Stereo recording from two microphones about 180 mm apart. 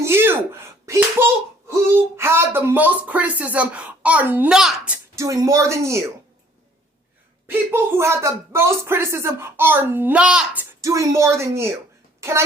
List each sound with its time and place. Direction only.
0.0 s a sound: 10° right (ahead or behind)
5.1 s speech: 20° right (ahead or behind)
7.4 s speech: 15° right (ahead or behind)